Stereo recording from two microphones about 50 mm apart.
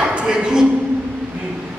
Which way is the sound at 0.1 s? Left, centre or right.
Centre.